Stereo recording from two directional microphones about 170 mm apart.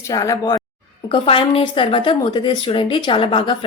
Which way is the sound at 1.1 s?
30° left (ahead or behind).